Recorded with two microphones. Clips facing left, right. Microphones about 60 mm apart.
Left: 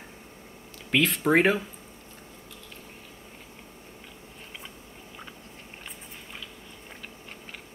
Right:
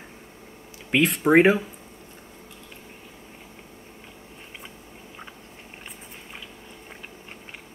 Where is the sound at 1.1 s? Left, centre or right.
Centre.